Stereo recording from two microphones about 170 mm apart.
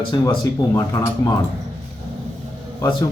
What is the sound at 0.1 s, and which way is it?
A man's voice, 25° left (ahead or behind).